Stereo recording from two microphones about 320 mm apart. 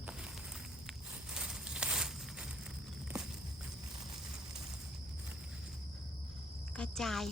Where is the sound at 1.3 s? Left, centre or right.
Centre.